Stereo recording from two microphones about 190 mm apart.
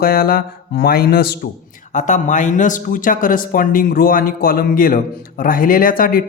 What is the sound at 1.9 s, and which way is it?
A man's voice, 40° left (ahead or behind).